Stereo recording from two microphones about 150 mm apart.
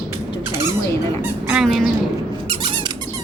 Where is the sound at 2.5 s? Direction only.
35° right (ahead or behind).